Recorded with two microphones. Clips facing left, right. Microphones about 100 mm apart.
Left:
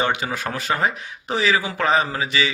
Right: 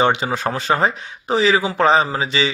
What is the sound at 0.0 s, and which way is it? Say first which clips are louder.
Speech: right 5 dB; 25° right (ahead or behind).